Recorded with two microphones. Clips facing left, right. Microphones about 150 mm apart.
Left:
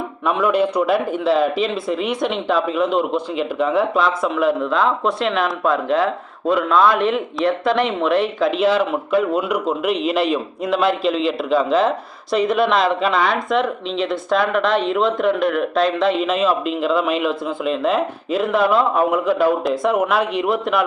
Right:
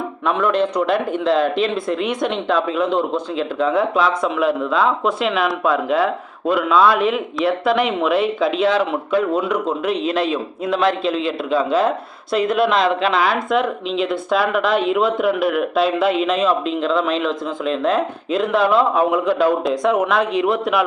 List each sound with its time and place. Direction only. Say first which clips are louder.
0.3 s speech: left 1 dB; 5° left (ahead or behind)